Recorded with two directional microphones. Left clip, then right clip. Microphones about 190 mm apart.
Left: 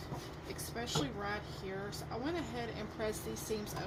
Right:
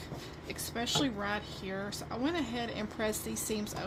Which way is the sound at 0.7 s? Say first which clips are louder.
Right 6 dB; 50° right (ahead or behind).